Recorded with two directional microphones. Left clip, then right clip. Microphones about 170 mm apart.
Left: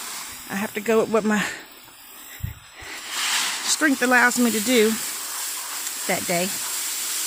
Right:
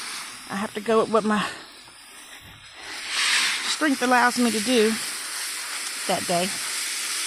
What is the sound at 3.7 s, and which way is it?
Speech, 35° left (ahead or behind).